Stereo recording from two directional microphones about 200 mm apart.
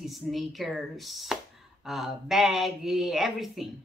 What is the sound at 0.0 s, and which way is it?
Speech, centre (ahead or behind).